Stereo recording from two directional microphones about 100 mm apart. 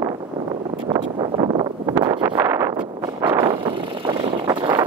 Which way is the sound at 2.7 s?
50° right (ahead or behind).